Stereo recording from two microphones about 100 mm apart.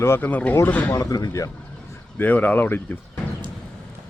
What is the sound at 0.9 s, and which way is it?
Speech, 40° left (ahead or behind).